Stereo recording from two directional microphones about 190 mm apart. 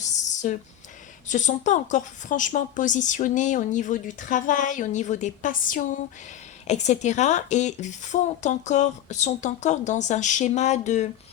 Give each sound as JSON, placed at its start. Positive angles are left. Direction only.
{"t": 0.4, "sound": "a woman's voice", "side_deg": 40}